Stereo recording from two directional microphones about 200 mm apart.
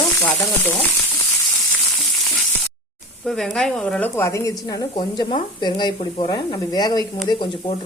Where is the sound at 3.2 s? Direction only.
Centre (ahead or behind); by 7.7 s 25° left (ahead or behind).